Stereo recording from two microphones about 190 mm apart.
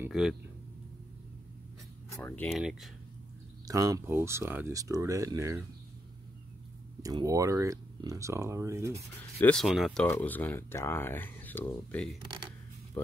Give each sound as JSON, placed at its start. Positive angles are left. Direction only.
{"t": 0.0, "sound": "speech", "side_deg": 0}
{"t": 2.0, "sound": "speech", "side_deg": 10}
{"t": 2.5, "sound": "speech", "side_deg": 0}
{"t": 3.6, "sound": "speech", "side_deg": -20}
{"t": 7.0, "sound": "speech", "side_deg": -20}
{"t": 9.4, "sound": "speech", "side_deg": 5}